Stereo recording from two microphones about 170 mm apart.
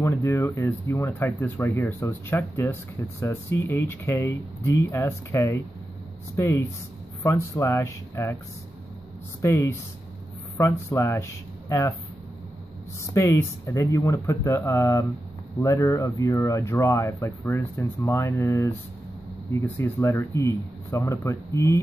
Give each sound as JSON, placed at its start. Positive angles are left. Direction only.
{"t": 0.0, "sound": "speech", "side_deg": 15}
{"t": 9.4, "sound": "speech", "side_deg": 15}
{"t": 13.1, "sound": "speech", "side_deg": 15}